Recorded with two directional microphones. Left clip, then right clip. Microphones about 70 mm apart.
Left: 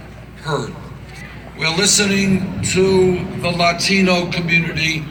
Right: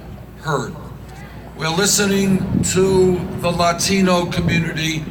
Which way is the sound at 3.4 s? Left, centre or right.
Right.